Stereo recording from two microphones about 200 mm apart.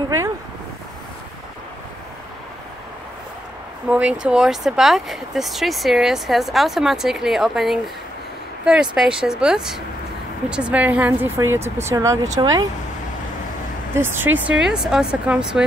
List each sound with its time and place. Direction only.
3.9 s speech: 5° right (ahead or behind)
13.9 s speech: 10° right (ahead or behind)